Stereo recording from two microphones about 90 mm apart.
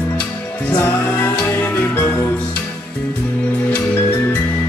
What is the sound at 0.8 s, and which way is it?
Music, 25° left (ahead or behind).